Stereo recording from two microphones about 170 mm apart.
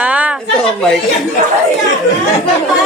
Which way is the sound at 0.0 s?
5° right (ahead or behind).